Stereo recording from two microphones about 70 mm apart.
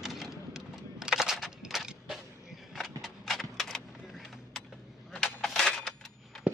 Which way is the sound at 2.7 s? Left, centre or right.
Centre.